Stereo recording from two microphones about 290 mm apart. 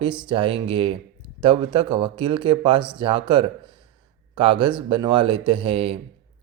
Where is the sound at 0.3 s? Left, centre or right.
Centre.